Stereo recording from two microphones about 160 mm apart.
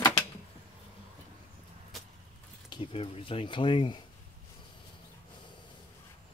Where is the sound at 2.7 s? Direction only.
35° left (ahead or behind).